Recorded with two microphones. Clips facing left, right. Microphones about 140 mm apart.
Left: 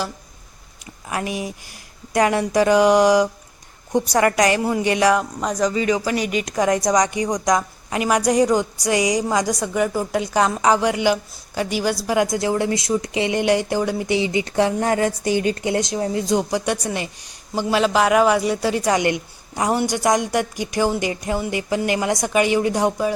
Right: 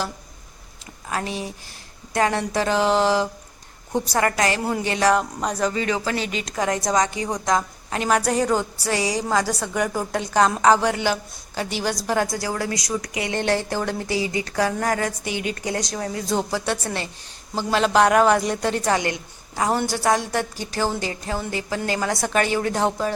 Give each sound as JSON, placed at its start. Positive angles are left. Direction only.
{"t": 1.1, "sound": "a woman's voice", "side_deg": 15}
{"t": 5.1, "sound": "speech", "side_deg": 0}
{"t": 6.1, "sound": "a woman's voice", "side_deg": 15}
{"t": 15.3, "sound": "a woman's voice", "side_deg": 40}
{"t": 15.6, "sound": "a woman's voice", "side_deg": 25}